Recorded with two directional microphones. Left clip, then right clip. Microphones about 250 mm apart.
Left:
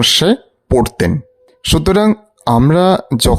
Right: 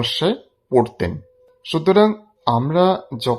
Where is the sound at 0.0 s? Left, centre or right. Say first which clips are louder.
Left 9 dB; left.